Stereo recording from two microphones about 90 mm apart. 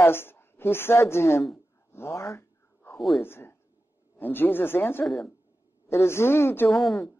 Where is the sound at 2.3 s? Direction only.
25° left (ahead or behind).